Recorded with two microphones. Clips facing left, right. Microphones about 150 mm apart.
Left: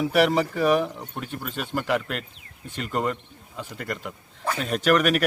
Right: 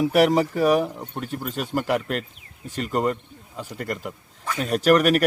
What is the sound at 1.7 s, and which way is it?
Speech, 40° right (ahead or behind).